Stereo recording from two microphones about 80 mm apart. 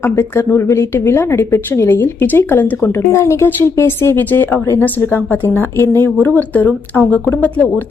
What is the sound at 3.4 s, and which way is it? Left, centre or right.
Speech, left.